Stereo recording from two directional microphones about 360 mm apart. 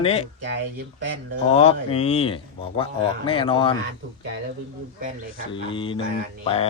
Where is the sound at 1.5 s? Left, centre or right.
Centre.